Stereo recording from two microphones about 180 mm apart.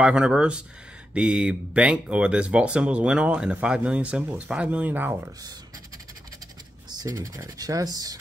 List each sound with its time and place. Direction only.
0.0 s speech: 5° right (ahead or behind)
6.9 s speech: 20° right (ahead or behind)